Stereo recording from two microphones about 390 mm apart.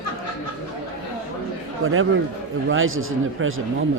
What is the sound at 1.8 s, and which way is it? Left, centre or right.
A man's voice, right.